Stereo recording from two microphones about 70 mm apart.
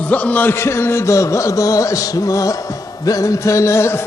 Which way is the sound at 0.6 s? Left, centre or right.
Left.